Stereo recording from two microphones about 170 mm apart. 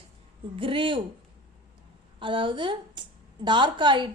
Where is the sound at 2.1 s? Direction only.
30° right (ahead or behind).